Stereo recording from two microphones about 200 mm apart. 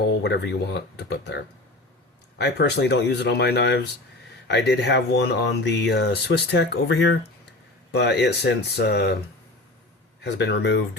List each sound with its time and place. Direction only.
0.2 s speech: 60° left (ahead or behind)
2.4 s speech: 55° left (ahead or behind)
10.2 s speech: 60° left (ahead or behind)